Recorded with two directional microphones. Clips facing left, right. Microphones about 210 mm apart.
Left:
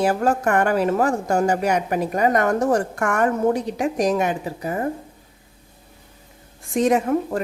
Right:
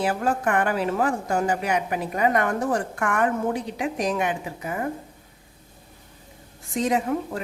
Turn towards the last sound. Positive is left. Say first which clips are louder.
# left 4 dB
turn(degrees=50)  # may be behind; listen again after turning